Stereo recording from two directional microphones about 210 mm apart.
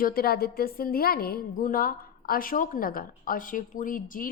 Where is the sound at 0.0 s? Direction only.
45° left (ahead or behind).